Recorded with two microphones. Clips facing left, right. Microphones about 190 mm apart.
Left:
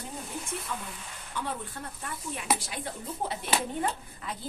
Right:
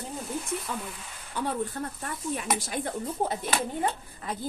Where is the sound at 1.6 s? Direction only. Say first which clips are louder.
Right 8 dB; 45° right (ahead or behind).